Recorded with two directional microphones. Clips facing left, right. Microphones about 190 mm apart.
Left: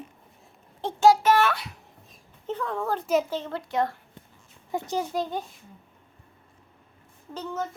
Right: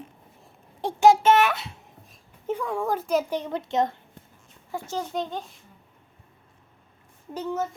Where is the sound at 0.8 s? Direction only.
20° right (ahead or behind).